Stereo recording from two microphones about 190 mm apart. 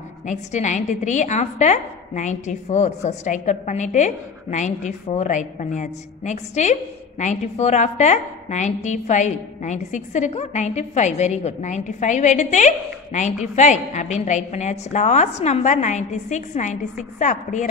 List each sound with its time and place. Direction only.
0.3 s a woman's voice: 40° left (ahead or behind)